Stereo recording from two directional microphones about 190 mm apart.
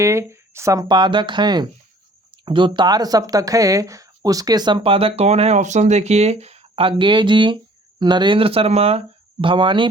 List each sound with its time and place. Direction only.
0.0 s speech: 15° right (ahead or behind)